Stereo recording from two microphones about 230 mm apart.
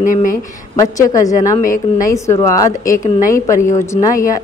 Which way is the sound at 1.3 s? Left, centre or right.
Left.